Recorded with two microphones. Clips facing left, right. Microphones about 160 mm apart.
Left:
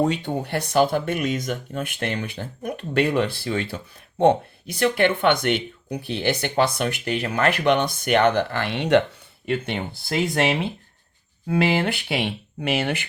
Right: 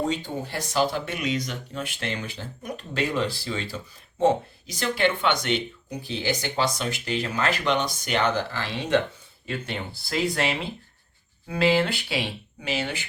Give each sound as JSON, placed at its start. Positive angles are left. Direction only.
{"t": 0.1, "sound": "speech", "side_deg": 65}